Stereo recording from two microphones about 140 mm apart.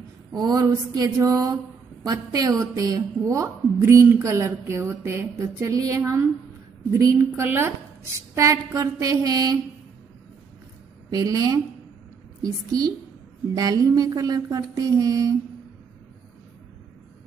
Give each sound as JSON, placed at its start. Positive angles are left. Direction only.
{"t": 0.3, "sound": "a sound", "side_deg": -25}
{"t": 0.7, "sound": "a woman's voice", "side_deg": -20}
{"t": 11.1, "sound": "a woman's voice", "side_deg": -25}